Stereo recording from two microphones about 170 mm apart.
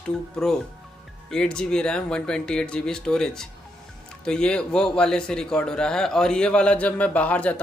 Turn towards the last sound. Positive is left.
turn(degrees=10)  # may be behind; listen again after turning